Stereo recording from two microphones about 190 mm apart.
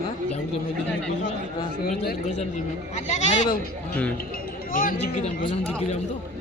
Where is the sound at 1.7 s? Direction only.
55° left (ahead or behind).